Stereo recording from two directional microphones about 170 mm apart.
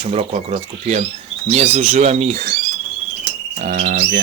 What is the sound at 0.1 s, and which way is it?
Speech, 40° right (ahead or behind).